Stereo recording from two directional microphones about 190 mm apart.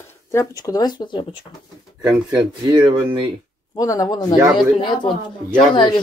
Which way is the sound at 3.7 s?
20° left (ahead or behind).